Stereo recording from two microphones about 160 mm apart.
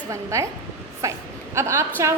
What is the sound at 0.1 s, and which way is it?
A woman's voice, 20° right (ahead or behind).